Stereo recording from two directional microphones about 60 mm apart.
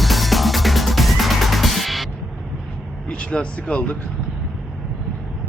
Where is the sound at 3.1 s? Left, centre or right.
Centre.